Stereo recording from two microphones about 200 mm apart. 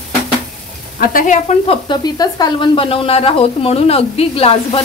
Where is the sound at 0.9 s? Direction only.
45° left (ahead or behind).